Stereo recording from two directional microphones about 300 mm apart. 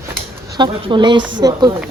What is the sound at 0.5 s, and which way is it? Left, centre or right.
Speech, centre.